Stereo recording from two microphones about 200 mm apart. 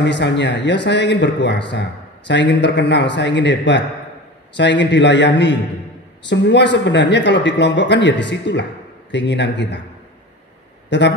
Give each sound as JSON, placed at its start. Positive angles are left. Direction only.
{"t": 0.0, "sound": "speech", "side_deg": 60}
{"t": 10.9, "sound": "speech", "side_deg": 60}